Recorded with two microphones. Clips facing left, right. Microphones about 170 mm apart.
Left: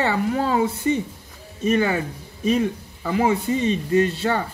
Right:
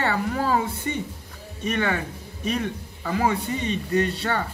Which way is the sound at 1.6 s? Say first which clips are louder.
Left 5 dB; 30° left (ahead or behind).